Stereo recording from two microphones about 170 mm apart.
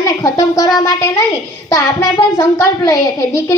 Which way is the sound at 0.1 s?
20° left (ahead or behind).